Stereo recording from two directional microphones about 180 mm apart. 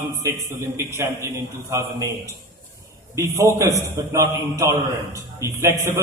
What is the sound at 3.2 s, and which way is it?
A man's voice, 15° right (ahead or behind).